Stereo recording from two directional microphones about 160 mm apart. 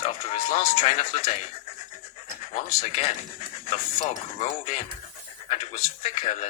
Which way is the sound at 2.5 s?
50° left (ahead or behind).